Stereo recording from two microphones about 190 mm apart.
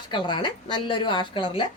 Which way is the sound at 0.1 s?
25° left (ahead or behind).